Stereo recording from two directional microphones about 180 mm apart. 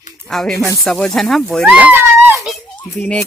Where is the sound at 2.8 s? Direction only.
10° left (ahead or behind).